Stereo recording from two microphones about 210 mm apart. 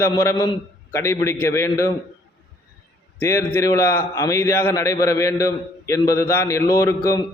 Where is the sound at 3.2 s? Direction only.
10° left (ahead or behind).